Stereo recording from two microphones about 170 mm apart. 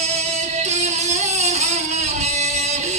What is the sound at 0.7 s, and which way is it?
Music, 40° right (ahead or behind).